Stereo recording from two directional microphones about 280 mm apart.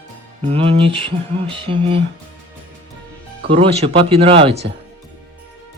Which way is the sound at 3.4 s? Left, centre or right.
Right.